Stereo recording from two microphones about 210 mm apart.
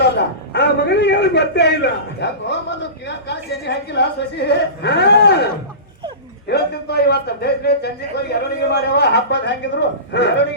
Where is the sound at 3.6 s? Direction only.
55° left (ahead or behind).